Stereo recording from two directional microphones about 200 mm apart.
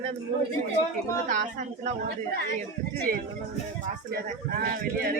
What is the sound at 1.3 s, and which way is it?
Speech, 40° right (ahead or behind).